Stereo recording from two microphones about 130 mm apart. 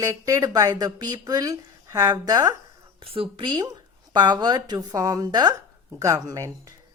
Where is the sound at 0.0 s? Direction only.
25° right (ahead or behind).